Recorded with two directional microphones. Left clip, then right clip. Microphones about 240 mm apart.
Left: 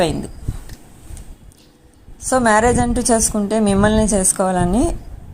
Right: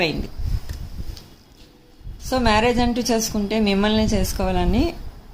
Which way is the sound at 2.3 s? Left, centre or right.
Centre.